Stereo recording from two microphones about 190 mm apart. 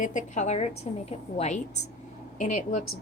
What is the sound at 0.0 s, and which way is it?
A woman's voice, 40° left (ahead or behind).